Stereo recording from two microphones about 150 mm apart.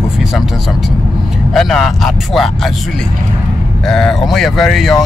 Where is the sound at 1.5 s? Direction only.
Centre (ahead or behind).